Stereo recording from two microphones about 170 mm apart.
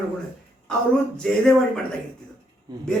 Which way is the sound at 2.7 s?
25° right (ahead or behind).